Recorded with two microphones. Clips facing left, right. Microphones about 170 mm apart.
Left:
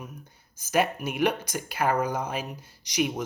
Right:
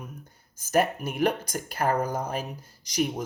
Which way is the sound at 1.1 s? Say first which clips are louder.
Even; 45° right (ahead or behind).